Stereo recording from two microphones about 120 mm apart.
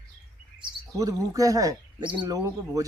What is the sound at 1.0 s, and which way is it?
Speech, 30° right (ahead or behind).